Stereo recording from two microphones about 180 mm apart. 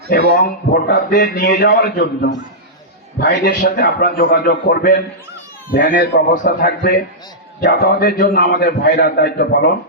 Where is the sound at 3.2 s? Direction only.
55° left (ahead or behind).